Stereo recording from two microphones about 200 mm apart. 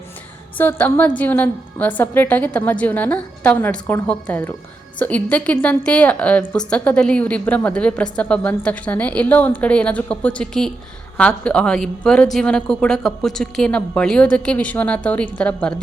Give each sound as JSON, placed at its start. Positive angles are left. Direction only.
{"t": 0.5, "sound": "a woman's voice", "side_deg": 10}